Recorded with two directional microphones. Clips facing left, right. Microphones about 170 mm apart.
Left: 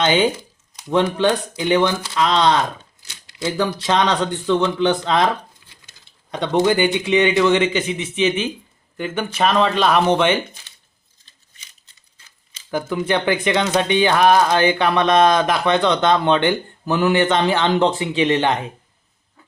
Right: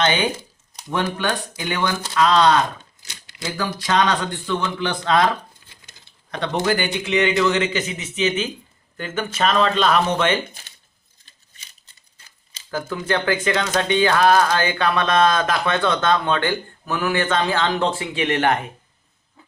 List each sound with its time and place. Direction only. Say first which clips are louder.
0.0 s speech: left 4 dB; 25° left (ahead or behind)
6.3 s a man's voice: left 4 dB; 20° left (ahead or behind)
12.7 s speech: left 3 dB; 15° left (ahead or behind)